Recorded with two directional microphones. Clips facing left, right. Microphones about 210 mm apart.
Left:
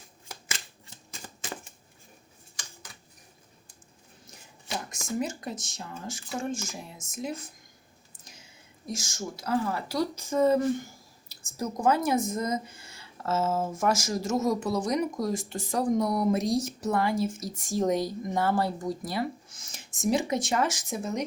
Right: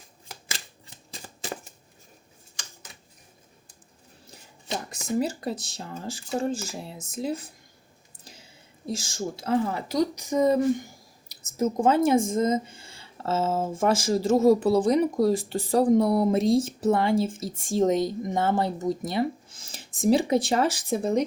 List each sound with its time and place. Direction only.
5.2 s speech: 35° right (ahead or behind)
8.2 s whispering: 30° right (ahead or behind)
8.9 s speech: 30° right (ahead or behind)